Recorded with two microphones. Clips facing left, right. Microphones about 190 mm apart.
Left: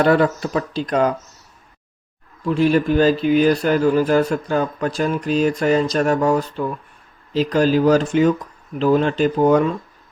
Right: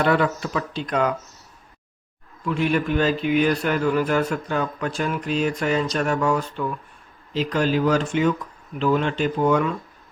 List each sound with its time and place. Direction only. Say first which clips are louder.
0.0 s speech: left 5 dB; 40° left (ahead or behind)
2.4 s speech: left 6 dB; 35° left (ahead or behind)